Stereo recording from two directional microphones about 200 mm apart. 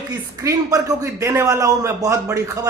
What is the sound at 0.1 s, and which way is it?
A man's voice, 15° right (ahead or behind).